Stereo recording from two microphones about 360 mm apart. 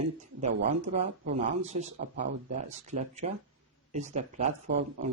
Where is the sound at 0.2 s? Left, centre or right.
Centre.